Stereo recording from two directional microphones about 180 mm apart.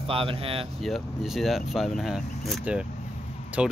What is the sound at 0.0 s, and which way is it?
Speech, 30° right (ahead or behind).